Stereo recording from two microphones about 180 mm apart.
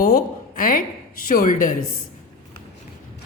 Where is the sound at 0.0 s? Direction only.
55° left (ahead or behind).